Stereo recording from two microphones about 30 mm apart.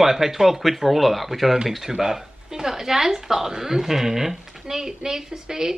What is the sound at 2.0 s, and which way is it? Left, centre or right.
Speech, centre.